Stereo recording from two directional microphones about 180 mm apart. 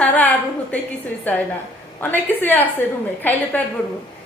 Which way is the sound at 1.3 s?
10° left (ahead or behind).